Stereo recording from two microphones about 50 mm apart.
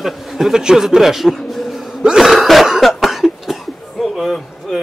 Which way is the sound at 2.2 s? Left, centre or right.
Centre.